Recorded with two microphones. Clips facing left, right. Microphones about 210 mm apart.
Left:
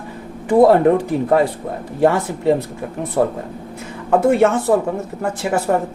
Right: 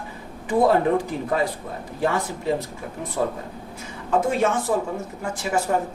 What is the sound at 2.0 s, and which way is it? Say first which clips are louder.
Speech: left 8 dB; 60° left (ahead or behind).